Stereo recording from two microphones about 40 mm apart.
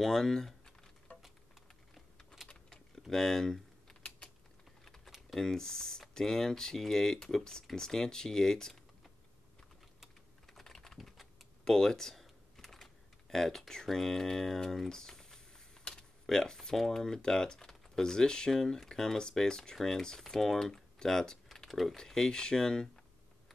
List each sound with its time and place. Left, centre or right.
0.0 s speech: centre
3.1 s typing: centre
5.3 s speech: centre
10.5 s typing: centre
11.1 s computer keyboard: centre
16.7 s speech: centre
21.5 s typing: centre
21.9 s speech: centre